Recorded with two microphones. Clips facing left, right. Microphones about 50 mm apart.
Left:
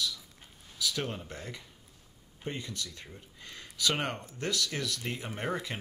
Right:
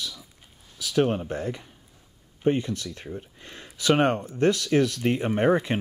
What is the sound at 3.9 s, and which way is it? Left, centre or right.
Speech, right.